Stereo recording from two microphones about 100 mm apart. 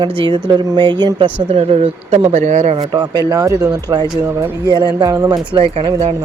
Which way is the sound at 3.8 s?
45° right (ahead or behind).